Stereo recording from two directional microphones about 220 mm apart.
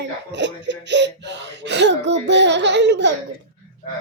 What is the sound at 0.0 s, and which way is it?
Speech, 55° right (ahead or behind).